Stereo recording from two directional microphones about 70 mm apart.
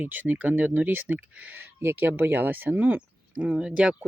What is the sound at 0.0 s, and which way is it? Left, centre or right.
Speech, right.